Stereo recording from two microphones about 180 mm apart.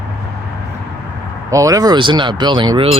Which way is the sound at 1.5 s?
20° right (ahead or behind).